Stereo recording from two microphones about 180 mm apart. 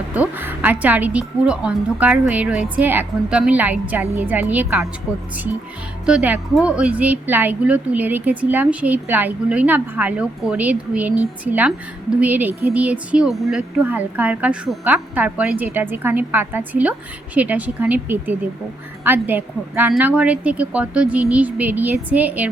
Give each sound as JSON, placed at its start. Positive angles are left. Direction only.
{"t": 0.1, "sound": "speech", "side_deg": -10}